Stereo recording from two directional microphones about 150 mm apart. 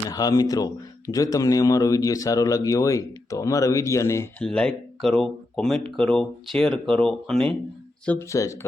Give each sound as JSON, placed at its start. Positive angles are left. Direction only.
{"t": 0.1, "sound": "speech", "side_deg": 25}
{"t": 4.4, "sound": "speech", "side_deg": 5}
{"t": 8.3, "sound": "speech", "side_deg": 20}